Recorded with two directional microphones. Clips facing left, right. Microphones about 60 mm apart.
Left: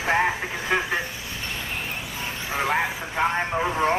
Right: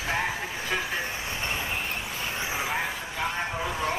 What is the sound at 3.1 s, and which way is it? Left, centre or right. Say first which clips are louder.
Speech: left 8 dB; left.